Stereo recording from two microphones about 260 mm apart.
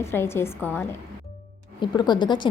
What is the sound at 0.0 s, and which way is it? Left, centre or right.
A woman's voice, centre.